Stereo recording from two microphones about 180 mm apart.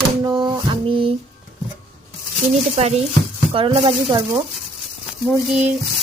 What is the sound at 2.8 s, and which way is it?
Speech, 35° right (ahead or behind).